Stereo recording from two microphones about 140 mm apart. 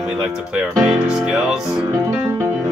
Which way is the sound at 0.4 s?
5° right (ahead or behind).